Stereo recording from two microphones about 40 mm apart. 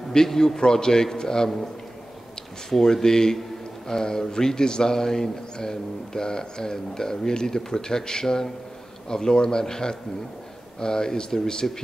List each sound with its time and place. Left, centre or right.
0.1 s a man's voice: centre
2.7 s a man's voice: centre